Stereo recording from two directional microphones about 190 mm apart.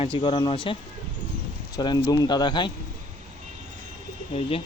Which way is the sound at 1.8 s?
20° left (ahead or behind).